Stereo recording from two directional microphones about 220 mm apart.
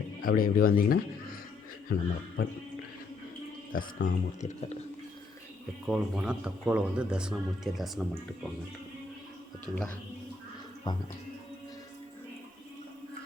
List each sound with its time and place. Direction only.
0.2 s speech: 40° left (ahead or behind)
1.9 s a man's voice: 50° left (ahead or behind)
3.8 s a man's voice: 45° left (ahead or behind)
4.4 s speech: 35° left (ahead or behind)
5.8 s speech: 5° right (ahead or behind)
9.7 s speech: 5° left (ahead or behind)
10.9 s music: 20° left (ahead or behind)